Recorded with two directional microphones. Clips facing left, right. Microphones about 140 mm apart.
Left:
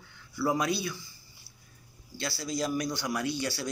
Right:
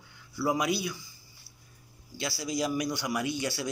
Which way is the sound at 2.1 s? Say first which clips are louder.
Right 1 dB; 15° right (ahead or behind).